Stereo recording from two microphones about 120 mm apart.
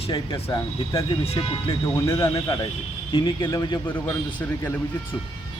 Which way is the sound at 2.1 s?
25° left (ahead or behind).